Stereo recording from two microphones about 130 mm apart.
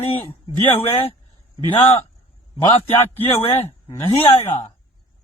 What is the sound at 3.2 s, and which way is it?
A man's voice, 50° left (ahead or behind).